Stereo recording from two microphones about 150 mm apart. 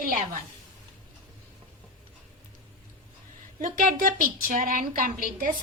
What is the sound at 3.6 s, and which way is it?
A woman's voice, 60° right (ahead or behind).